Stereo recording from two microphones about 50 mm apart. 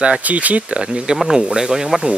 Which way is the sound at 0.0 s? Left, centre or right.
Right.